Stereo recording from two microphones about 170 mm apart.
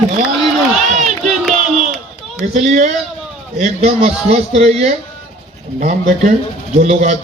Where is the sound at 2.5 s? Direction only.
40° right (ahead or behind).